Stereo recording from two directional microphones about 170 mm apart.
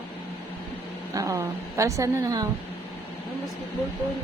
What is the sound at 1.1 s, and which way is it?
A woman's voice, 20° right (ahead or behind).